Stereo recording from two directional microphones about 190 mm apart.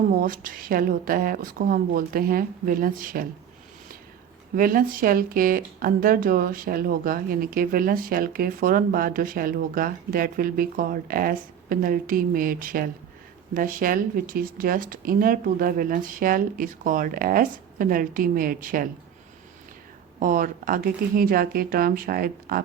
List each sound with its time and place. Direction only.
0.1 s speech: 45° right (ahead or behind)
4.5 s speech: 50° right (ahead or behind)
20.1 s speech: 45° right (ahead or behind)